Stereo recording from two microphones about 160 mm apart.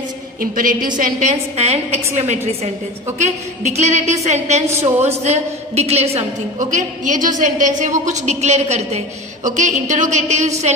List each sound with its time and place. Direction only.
0.4 s a woman's voice: 60° right (ahead or behind); by 2.3 s 40° right (ahead or behind)
3.8 s a woman's voice: 45° right (ahead or behind)